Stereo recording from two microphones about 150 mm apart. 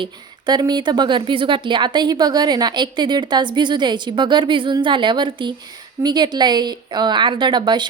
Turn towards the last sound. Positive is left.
turn(degrees=-30)  # may be behind; listen again after turning